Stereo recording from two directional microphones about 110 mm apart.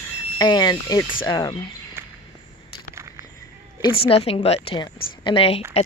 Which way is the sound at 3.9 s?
65° left (ahead or behind).